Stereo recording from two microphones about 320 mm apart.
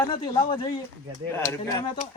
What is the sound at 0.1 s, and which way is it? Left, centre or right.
Speech, centre.